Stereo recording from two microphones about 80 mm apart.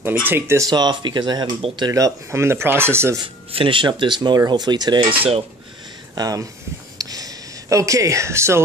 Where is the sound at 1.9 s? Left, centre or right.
Right.